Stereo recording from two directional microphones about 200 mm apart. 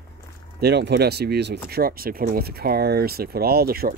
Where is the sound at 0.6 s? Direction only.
55° right (ahead or behind).